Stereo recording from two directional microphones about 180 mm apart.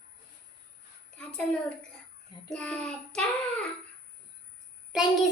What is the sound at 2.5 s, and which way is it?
Speech, 5° left (ahead or behind).